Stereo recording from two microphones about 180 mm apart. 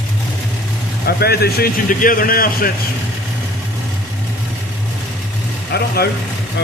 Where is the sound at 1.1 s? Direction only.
60° left (ahead or behind).